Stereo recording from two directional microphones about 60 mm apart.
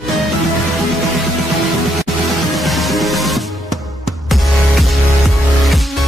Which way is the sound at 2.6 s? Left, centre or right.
Centre.